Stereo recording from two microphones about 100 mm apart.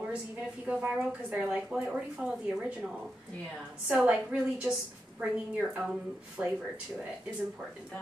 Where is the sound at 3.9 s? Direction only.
10° right (ahead or behind).